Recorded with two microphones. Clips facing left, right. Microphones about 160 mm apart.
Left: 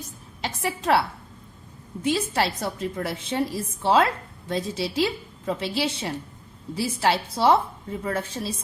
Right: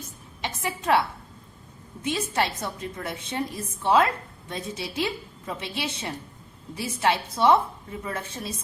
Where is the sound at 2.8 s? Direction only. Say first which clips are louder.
Left 5 dB; 30° left (ahead or behind).